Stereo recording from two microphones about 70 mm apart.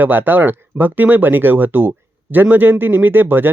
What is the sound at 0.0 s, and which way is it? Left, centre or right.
A man's voice, right.